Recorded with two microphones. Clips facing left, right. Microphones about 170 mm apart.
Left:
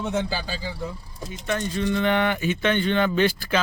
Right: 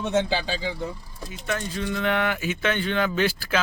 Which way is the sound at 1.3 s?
5° right (ahead or behind).